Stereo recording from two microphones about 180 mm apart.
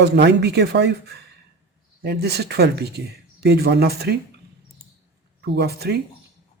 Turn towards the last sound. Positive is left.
turn(degrees=-65)  # may be behind; listen again after turning